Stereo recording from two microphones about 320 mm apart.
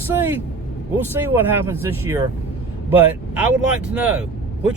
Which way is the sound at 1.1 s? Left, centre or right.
Centre.